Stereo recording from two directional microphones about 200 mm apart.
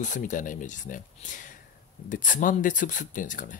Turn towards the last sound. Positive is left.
turn(degrees=40)  # may be behind; listen again after turning